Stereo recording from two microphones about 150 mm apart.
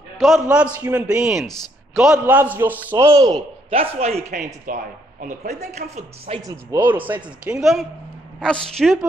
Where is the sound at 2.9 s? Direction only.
20° right (ahead or behind); by 6.4 s 45° right (ahead or behind).